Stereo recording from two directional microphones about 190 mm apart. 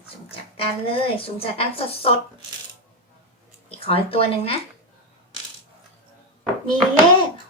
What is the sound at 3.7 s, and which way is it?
Speech, 30° left (ahead or behind).